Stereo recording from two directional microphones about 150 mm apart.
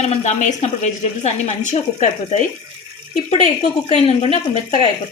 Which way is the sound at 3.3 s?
50° left (ahead or behind).